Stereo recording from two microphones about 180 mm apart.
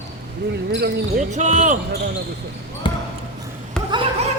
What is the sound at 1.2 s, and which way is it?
Speech, 40° right (ahead or behind).